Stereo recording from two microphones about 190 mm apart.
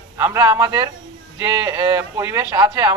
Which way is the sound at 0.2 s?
15° right (ahead or behind).